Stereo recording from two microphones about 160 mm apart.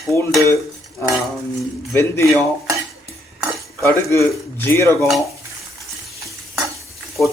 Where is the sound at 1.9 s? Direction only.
15° left (ahead or behind).